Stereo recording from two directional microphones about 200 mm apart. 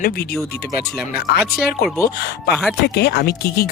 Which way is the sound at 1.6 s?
50° left (ahead or behind).